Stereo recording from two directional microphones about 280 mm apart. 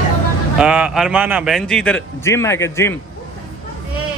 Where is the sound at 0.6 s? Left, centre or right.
Centre.